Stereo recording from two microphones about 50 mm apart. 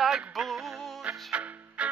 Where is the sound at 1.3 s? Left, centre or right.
Right.